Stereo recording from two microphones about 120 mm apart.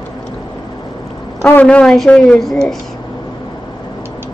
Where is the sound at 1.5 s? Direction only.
10° left (ahead or behind).